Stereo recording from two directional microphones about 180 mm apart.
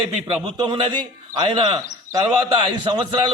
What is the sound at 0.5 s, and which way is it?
Speech, 30° right (ahead or behind).